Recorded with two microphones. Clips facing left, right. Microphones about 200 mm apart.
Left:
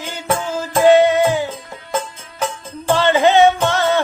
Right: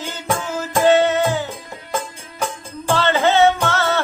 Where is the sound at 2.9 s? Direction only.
15° left (ahead or behind).